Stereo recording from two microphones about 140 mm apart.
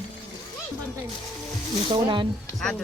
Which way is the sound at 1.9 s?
35° right (ahead or behind).